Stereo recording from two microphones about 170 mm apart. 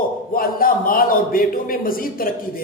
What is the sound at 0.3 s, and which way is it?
A man's voice, 55° left (ahead or behind).